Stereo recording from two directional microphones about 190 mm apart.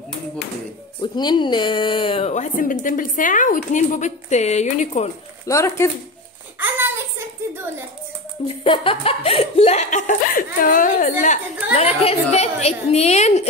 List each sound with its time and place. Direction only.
1.0 s a woman's voice: 25° left (ahead or behind)
5.5 s speech: 15° left (ahead or behind)
6.6 s a sound: 10° right (ahead or behind)
8.5 s a woman's voice: 25° left (ahead or behind); by 11.3 s 45° left (ahead or behind)
11.7 s a woman's voice: 35° left (ahead or behind)